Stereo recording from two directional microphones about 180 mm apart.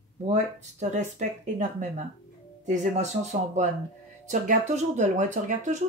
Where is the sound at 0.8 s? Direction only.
40° right (ahead or behind).